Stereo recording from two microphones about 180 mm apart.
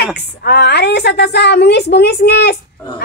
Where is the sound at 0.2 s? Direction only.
65° left (ahead or behind).